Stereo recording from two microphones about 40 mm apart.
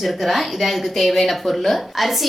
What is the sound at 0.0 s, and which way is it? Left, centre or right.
Speech, centre.